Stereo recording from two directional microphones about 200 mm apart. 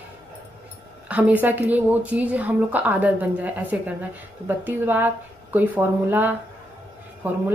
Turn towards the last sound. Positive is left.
turn(degrees=-10)  # may be behind; listen again after turning